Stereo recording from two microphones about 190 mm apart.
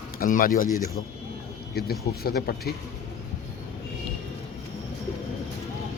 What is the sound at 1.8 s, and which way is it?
Speech, 55° left (ahead or behind).